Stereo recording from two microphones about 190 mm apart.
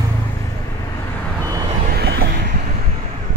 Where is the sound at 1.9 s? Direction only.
55° right (ahead or behind).